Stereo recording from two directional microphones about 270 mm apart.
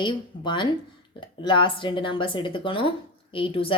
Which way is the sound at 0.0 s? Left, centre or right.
Centre.